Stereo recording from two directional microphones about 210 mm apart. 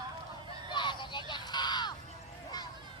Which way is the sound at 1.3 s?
20° left (ahead or behind).